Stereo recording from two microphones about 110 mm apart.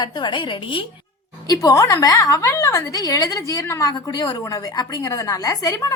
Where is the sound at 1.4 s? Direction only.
30° left (ahead or behind).